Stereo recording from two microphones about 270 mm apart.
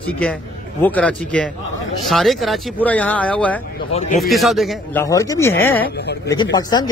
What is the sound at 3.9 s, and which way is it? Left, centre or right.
Speech, left.